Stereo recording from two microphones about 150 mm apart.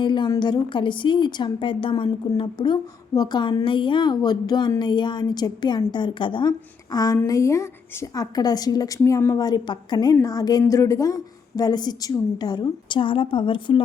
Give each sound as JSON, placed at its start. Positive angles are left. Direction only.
{"t": 0.0, "sound": "a woman's voice", "side_deg": 30}